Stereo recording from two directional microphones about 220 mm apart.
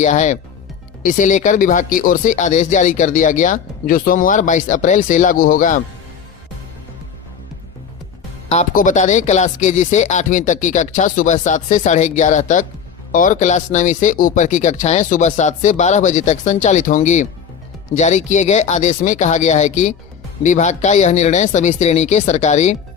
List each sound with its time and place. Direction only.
0.0 s speech: 35° left (ahead or behind)
8.4 s speech: 35° left (ahead or behind)